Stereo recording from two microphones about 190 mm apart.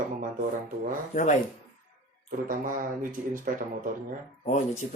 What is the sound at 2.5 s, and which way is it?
Speech, 45° right (ahead or behind).